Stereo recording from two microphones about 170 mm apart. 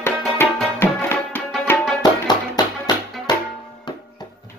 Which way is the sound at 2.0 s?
25° left (ahead or behind).